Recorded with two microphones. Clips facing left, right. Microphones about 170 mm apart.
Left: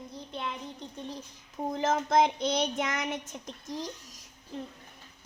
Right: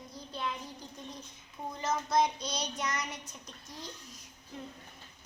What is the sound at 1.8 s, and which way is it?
Child singing, 50° left (ahead or behind).